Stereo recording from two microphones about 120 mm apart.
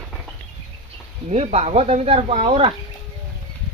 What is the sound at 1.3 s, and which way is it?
Speech, 60° right (ahead or behind).